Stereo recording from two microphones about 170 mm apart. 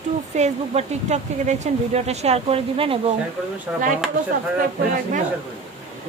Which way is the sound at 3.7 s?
10° right (ahead or behind).